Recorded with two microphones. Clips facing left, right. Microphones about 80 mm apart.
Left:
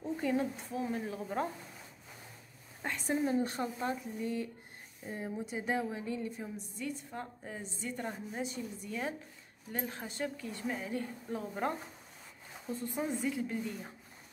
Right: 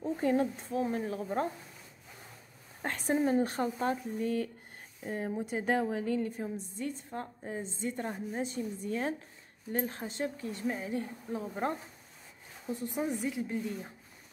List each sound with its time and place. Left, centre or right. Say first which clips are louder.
0.0 s speech: right 4 dB; right
2.8 s speech: right 3 dB; right
6.3 s a woman's voice: right 5 dB; right
12.6 s speech: right 2 dB; centre